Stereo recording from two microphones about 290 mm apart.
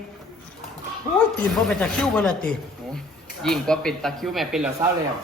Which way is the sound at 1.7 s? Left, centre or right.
Centre.